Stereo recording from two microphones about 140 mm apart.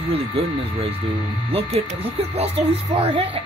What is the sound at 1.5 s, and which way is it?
Speech, 45° right (ahead or behind).